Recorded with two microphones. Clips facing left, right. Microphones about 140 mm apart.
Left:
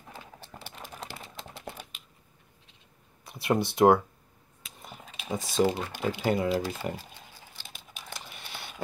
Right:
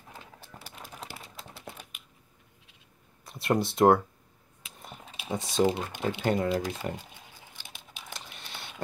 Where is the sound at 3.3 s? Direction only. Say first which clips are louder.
Even; centre (ahead or behind).